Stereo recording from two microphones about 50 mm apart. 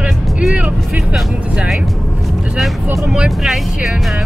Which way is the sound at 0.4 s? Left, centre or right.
Centre.